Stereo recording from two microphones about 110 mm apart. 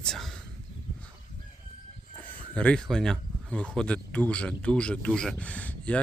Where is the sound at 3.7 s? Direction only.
10° left (ahead or behind).